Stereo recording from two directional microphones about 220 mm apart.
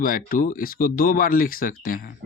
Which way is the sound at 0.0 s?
40° left (ahead or behind).